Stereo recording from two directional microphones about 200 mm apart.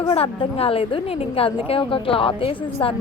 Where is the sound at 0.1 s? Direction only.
30° left (ahead or behind).